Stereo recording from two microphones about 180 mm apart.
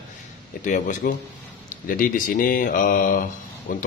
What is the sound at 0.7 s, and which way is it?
A man's voice, 45° left (ahead or behind).